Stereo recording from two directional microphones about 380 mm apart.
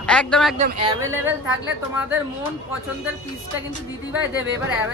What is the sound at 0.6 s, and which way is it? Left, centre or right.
Speech, centre.